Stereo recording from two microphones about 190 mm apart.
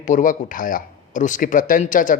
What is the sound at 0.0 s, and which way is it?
Speech, 40° left (ahead or behind).